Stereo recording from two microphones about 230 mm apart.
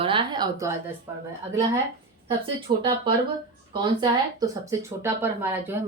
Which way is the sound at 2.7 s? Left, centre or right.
Right.